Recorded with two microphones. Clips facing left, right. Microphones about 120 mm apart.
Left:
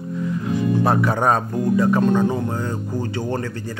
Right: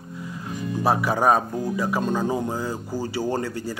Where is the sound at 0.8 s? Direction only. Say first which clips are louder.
Right 2 dB; 5° right (ahead or behind).